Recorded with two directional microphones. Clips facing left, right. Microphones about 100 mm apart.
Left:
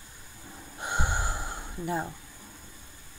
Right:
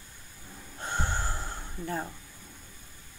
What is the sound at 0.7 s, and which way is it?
Gasp, 15° left (ahead or behind).